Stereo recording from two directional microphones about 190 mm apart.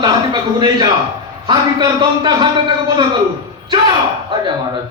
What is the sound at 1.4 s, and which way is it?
A man's voice, 20° right (ahead or behind).